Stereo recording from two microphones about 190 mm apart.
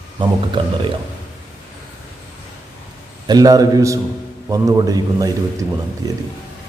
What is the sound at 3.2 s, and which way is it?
A man's voice, 20° right (ahead or behind).